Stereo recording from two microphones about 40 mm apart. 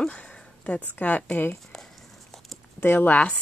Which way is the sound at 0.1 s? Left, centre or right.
Left.